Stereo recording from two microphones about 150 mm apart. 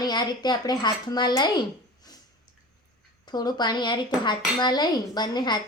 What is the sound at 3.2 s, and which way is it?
Speech, 30° left (ahead or behind).